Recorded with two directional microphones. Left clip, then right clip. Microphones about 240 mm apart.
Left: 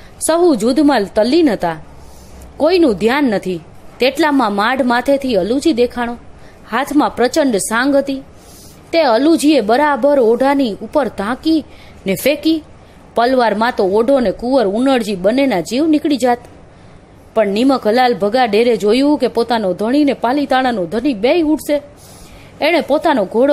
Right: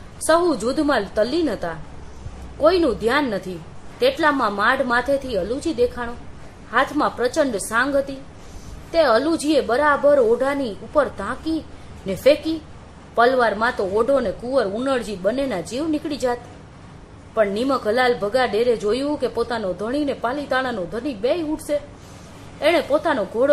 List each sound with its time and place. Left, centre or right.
0.3 s a woman's voice: left